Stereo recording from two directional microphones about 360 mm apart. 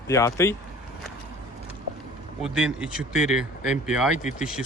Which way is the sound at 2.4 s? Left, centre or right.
Centre.